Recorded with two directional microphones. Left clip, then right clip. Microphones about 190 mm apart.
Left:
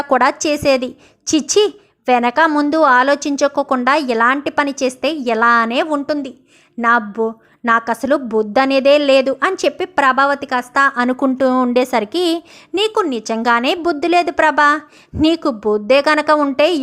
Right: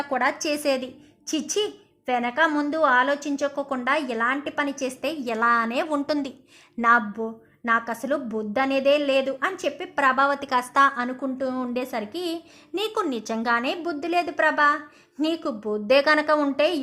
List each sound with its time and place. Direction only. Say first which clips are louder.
0.0 s a woman's voice: left 10 dB; 35° left (ahead or behind)
7.2 s a woman's voice: left 12 dB; 30° left (ahead or behind)
11.0 s a woman's voice: left 13 dB; 40° left (ahead or behind); by 16.8 s 25° left (ahead or behind)